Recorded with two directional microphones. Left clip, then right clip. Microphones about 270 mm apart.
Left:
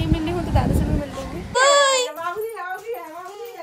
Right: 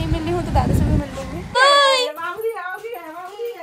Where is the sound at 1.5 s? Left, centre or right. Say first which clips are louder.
Right 2 dB; centre.